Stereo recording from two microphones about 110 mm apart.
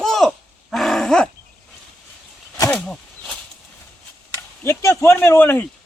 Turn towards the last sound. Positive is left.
turn(degrees=20)  # may be behind; listen again after turning